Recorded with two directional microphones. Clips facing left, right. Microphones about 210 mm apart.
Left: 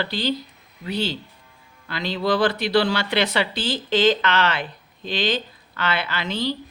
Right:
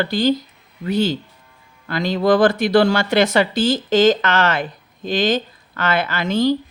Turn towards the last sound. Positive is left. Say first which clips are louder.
# right 8 dB
turn(degrees=-45)  # may be behind; listen again after turning